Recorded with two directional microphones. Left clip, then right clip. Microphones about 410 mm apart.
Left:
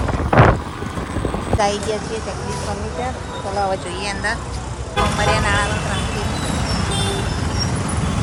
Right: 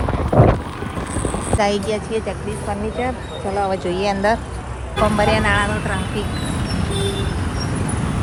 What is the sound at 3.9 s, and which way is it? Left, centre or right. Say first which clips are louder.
Vehicle: right 5 dB; centre.